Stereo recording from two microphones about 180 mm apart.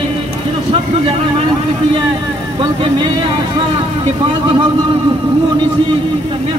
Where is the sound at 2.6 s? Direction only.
25° right (ahead or behind).